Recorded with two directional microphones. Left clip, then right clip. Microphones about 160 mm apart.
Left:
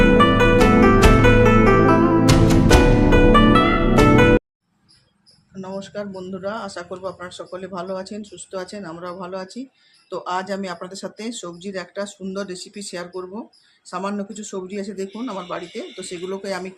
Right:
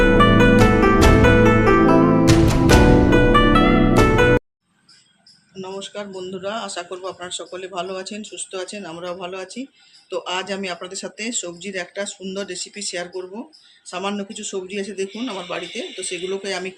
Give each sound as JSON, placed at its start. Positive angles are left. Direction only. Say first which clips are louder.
{"t": 0.0, "sound": "music", "louder": "even", "side_deg": 0}
{"t": 5.5, "sound": "speech", "louder": "even", "side_deg": 55}